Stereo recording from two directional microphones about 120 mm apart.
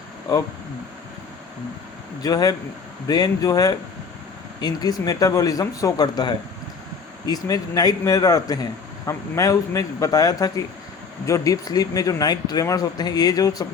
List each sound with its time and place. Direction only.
2.2 s speech: 30° left (ahead or behind)